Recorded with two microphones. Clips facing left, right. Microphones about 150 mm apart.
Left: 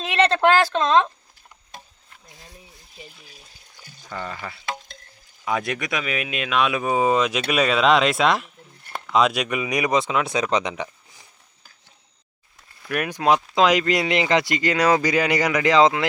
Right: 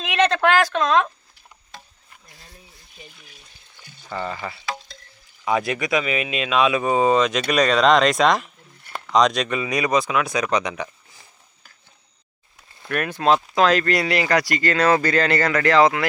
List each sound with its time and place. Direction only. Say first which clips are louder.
0.0 s speech: even; 30° left (ahead or behind)
2.2 s a sound: left 3 dB; 20° left (ahead or behind)
4.1 s speech: right 4 dB; 5° right (ahead or behind); by 11.3 s 20° left (ahead or behind)
12.9 s speech: right 1 dB; 15° left (ahead or behind)